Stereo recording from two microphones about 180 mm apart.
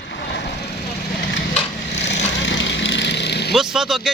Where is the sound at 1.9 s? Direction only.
75° left (ahead or behind).